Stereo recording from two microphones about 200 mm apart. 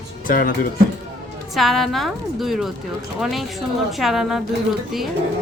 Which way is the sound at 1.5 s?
Centre (ahead or behind).